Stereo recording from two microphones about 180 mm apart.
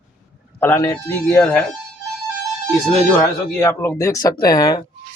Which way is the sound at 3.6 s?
15° left (ahead or behind).